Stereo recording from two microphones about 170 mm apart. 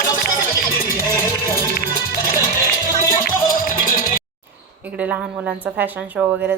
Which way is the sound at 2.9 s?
55° left (ahead or behind).